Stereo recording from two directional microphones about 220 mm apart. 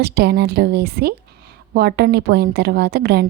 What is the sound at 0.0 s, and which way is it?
A woman's voice, 45° right (ahead or behind).